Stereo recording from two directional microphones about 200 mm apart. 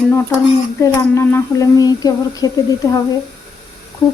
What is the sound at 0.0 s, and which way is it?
A woman's voice, 10° left (ahead or behind).